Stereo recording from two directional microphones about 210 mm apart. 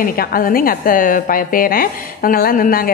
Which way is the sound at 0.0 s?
45° left (ahead or behind).